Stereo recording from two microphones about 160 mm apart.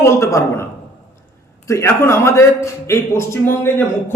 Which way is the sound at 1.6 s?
15° left (ahead or behind).